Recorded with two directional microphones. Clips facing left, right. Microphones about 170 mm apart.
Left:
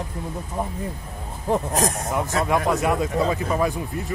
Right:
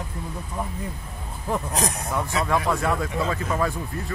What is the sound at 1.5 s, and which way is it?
Speech, 45° left (ahead or behind).